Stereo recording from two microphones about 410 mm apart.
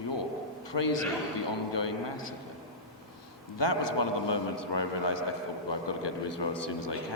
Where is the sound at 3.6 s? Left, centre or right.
Left.